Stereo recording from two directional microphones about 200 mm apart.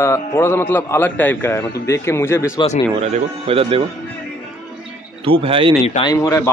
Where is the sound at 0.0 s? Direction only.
15° left (ahead or behind).